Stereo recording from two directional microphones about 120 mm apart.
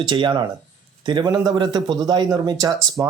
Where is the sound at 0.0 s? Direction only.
40° right (ahead or behind).